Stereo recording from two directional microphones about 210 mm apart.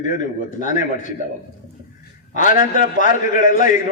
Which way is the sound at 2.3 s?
40° left (ahead or behind).